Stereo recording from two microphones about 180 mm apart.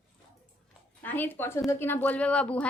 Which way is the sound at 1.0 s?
10° left (ahead or behind).